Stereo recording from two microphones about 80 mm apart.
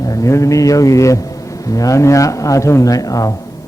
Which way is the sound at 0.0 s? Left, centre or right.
Left.